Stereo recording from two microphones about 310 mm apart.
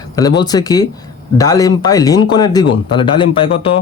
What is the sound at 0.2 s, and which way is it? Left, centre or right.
Speech, centre.